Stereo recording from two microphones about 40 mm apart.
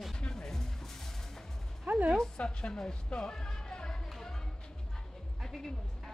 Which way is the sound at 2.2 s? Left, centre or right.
Left.